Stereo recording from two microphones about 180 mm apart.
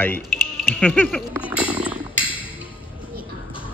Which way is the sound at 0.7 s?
10° left (ahead or behind).